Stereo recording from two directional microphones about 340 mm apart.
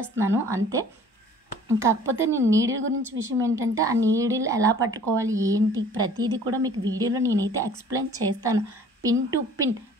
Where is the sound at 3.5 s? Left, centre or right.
Centre.